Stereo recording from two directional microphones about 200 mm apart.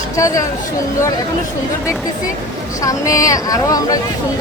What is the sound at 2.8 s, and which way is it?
Speech, 15° left (ahead or behind).